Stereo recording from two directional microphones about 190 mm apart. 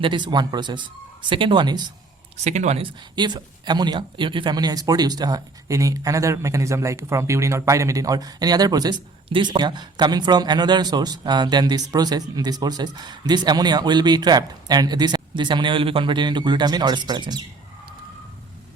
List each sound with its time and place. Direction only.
0.0 s speech: 25° right (ahead or behind)
2.4 s speech: 35° right (ahead or behind)